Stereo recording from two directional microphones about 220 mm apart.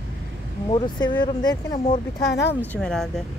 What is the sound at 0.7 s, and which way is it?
Speech, 20° left (ahead or behind).